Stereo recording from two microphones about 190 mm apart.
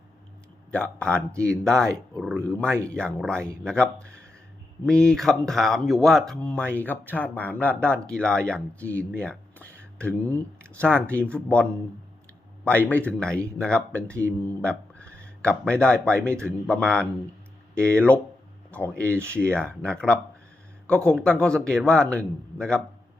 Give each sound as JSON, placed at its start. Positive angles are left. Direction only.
{"t": 0.7, "sound": "speech", "side_deg": 5}
{"t": 2.6, "sound": "speech", "side_deg": -15}
{"t": 3.2, "sound": "speech", "side_deg": 5}